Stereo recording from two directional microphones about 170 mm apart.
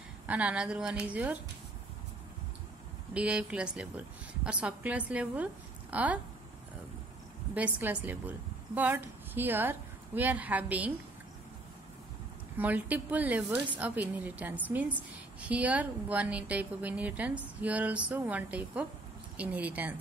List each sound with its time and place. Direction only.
0.3 s a woman's voice: 10° right (ahead or behind)
3.1 s a woman's voice: 5° right (ahead or behind)
7.5 s a woman's voice: 10° right (ahead or behind)
12.5 s a woman's voice: 10° right (ahead or behind)